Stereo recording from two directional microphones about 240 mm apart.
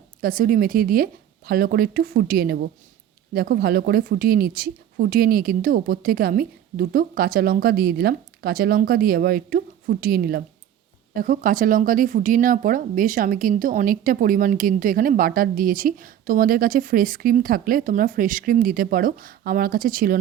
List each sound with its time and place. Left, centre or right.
0.2 s speech: right